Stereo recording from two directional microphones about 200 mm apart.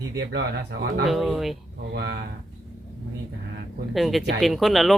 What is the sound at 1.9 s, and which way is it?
Speech, 60° right (ahead or behind).